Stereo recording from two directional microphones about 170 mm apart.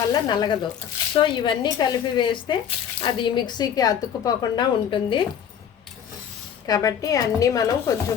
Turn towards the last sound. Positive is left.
turn(degrees=20)  # may be behind; listen again after turning